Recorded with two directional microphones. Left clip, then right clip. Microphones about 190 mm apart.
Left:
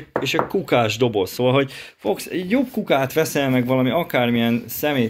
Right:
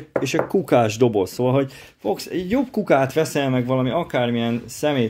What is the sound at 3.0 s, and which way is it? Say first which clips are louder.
Speech: even; 10° right (ahead or behind).